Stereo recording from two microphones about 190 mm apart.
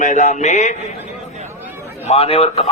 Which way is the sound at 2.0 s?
30° left (ahead or behind).